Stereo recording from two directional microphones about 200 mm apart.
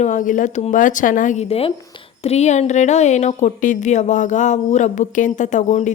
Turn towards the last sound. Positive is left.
turn(degrees=35)  # may be behind; listen again after turning